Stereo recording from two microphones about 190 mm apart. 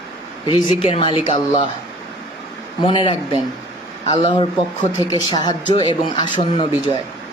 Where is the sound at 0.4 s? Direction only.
25° left (ahead or behind).